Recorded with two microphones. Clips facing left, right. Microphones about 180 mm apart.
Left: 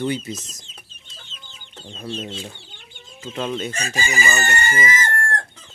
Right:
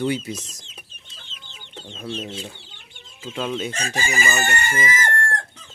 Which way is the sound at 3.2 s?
5° right (ahead or behind).